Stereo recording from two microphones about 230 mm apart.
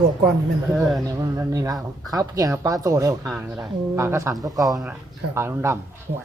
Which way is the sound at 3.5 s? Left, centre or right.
Centre.